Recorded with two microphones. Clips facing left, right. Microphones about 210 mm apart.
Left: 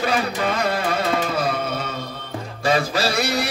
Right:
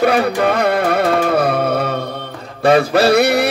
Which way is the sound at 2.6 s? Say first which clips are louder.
Right 9 dB; 60° right (ahead or behind).